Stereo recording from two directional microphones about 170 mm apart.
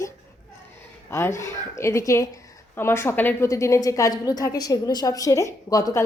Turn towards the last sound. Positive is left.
turn(degrees=20)  # may be behind; listen again after turning